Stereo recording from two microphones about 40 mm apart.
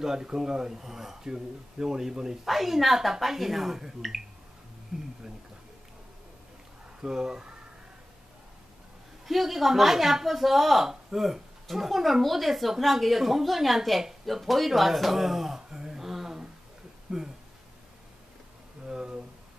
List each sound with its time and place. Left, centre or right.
0.0 s a woman's voice: centre
4.9 s speech: centre
7.0 s speech: centre
9.2 s a woman's voice: centre
17.1 s speech: right
18.9 s a sound: centre